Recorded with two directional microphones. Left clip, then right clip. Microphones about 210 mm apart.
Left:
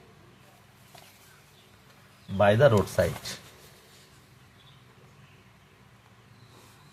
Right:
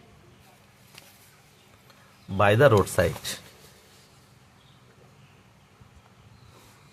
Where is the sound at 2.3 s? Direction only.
40° right (ahead or behind).